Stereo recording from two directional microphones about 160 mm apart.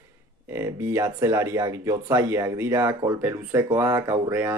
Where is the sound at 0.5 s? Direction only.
15° right (ahead or behind).